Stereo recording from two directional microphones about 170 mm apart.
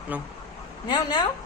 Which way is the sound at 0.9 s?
25° left (ahead or behind).